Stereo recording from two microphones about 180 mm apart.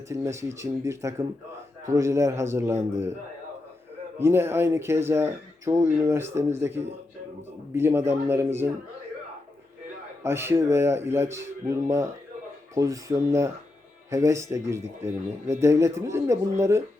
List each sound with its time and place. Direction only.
0.1 s speech: 15° right (ahead or behind)
4.2 s speech: 15° right (ahead or behind)
10.2 s speech: 15° right (ahead or behind)